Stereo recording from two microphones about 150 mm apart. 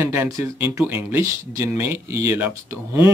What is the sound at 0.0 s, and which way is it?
Speech, 15° right (ahead or behind).